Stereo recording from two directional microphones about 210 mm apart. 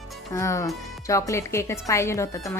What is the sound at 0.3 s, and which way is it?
A woman's voice, 15° left (ahead or behind).